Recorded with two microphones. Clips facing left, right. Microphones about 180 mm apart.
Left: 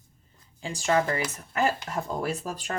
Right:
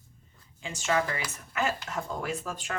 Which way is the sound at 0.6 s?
35° left (ahead or behind).